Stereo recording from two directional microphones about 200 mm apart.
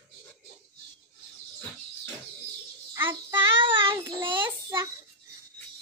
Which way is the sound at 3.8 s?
10° right (ahead or behind).